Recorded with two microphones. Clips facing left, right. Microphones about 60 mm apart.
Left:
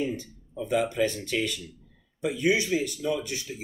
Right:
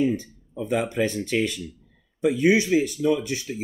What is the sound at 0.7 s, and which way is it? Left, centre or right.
Speech, right.